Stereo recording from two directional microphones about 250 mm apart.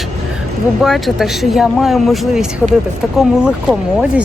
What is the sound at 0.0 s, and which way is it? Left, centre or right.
Speech, centre.